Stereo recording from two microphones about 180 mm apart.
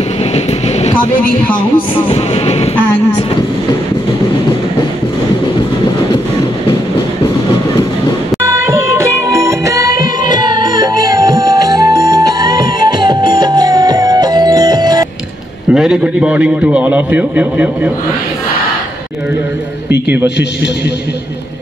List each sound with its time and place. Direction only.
2.0 s train: 35° left (ahead or behind)
8.6 s music: 15° right (ahead or behind)
15.7 s a man's voice: 5° right (ahead or behind)